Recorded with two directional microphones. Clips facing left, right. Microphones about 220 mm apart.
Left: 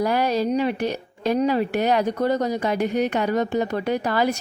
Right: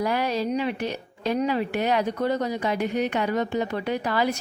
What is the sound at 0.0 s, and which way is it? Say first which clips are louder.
A woman's voice: left 4 dB; 40° left (ahead or behind).